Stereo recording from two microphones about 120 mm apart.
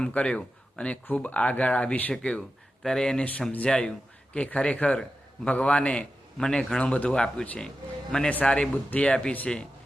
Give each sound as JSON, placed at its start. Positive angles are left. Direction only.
{"t": 0.0, "sound": "speech", "side_deg": 10}